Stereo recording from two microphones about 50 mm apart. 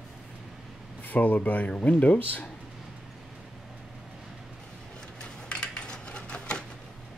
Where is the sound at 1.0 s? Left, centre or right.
Left.